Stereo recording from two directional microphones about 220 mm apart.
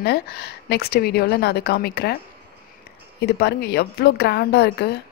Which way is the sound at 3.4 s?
50° left (ahead or behind).